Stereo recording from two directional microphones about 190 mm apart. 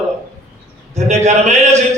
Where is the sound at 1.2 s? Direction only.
35° right (ahead or behind).